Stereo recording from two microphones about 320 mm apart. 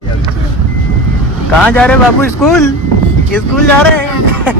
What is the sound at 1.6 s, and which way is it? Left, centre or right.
Speech, centre.